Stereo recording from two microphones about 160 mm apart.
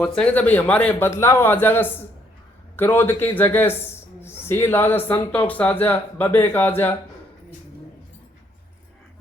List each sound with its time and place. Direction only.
0.2 s speech: 10° left (ahead or behind)